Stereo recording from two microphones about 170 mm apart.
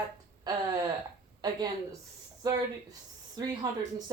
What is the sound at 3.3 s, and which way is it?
Speech, 20° right (ahead or behind).